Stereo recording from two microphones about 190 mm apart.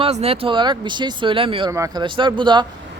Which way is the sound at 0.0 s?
30° right (ahead or behind).